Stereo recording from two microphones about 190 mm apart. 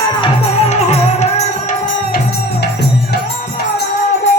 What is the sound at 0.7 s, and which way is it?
Music, 35° left (ahead or behind).